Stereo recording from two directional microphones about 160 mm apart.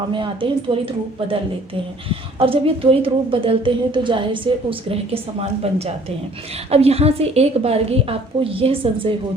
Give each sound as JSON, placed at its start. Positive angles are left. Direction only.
{"t": 0.1, "sound": "a woman's voice", "side_deg": -30}